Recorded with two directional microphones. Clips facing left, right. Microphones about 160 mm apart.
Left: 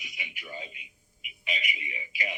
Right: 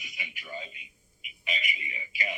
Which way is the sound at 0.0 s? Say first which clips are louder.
Left 1 dB; 45° right (ahead or behind).